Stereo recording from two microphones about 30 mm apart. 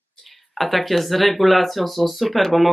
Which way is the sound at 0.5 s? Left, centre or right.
Centre.